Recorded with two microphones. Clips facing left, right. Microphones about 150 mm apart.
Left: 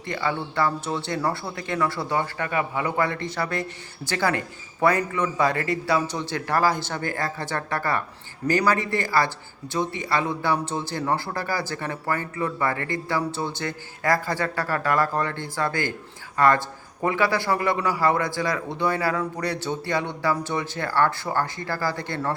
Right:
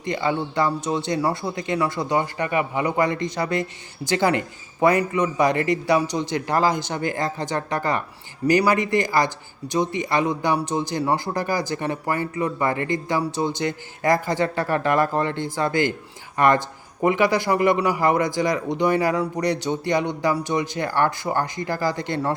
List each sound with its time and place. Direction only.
0.0 s speech: 20° right (ahead or behind)